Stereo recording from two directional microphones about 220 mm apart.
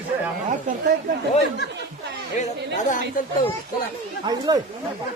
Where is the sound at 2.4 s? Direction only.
30° left (ahead or behind).